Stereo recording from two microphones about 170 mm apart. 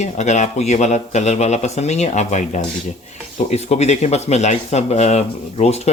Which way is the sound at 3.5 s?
40° left (ahead or behind).